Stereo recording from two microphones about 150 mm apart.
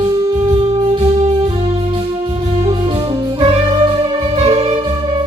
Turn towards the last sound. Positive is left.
turn(degrees=-40)  # may be behind; listen again after turning